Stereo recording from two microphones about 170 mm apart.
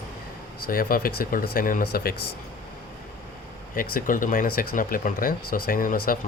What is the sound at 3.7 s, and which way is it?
Speech, 55° left (ahead or behind).